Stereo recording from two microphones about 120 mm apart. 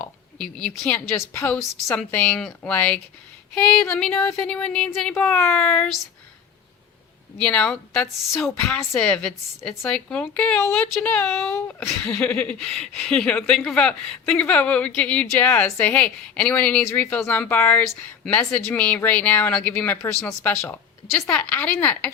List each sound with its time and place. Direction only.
0.0 s a sound: 5° left (ahead or behind)
1.3 s a woman's voice: 15° left (ahead or behind)
7.3 s a woman's voice: 10° left (ahead or behind)